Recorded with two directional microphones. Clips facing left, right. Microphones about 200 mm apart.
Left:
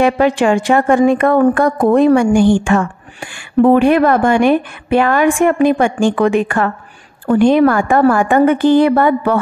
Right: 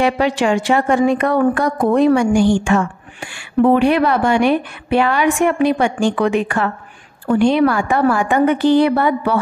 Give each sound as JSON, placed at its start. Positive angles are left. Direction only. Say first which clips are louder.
{"t": 0.0, "sound": "speech", "louder": "left 4 dB", "side_deg": 50}